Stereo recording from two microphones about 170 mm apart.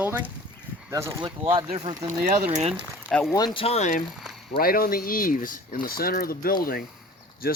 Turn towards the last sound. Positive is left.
turn(degrees=60)  # may be behind; listen again after turning